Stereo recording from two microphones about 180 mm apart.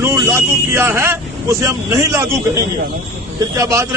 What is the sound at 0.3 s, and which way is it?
Speech, 15° right (ahead or behind).